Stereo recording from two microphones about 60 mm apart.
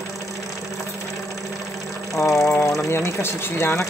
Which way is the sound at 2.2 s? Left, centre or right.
Left.